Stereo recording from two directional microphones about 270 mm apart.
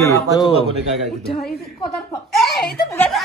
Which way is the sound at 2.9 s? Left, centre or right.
Centre.